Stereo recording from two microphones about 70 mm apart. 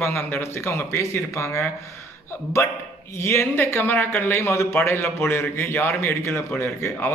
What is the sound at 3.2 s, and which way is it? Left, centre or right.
A man's voice, left.